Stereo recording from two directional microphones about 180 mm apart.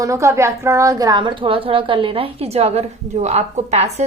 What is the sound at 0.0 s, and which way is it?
A woman's voice, 15° right (ahead or behind).